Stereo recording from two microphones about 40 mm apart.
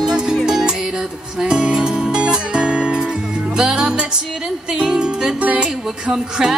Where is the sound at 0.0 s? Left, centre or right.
Centre.